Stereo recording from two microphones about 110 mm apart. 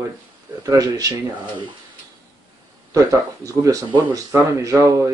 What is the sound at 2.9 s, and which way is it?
Speech, 30° right (ahead or behind).